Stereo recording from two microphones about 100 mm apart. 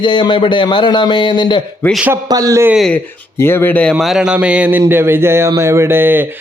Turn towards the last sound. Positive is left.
turn(degrees=-20)  # may be behind; listen again after turning